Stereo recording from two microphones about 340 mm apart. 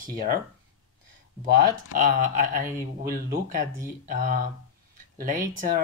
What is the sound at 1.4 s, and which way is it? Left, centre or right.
Speech, right.